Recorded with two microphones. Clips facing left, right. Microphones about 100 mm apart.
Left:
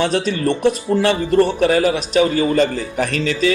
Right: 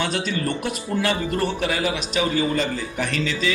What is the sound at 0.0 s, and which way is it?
Speech, 40° left (ahead or behind).